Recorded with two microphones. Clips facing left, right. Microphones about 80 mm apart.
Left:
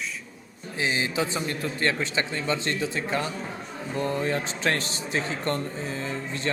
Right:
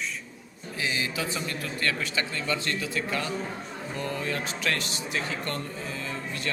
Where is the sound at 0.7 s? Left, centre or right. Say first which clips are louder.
Left 4 dB; left.